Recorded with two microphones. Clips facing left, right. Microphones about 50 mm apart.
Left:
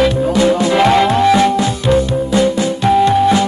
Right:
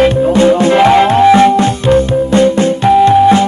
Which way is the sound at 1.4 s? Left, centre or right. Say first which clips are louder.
Right 5 dB; right.